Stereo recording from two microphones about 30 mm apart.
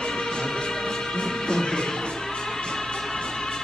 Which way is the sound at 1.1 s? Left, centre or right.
Left.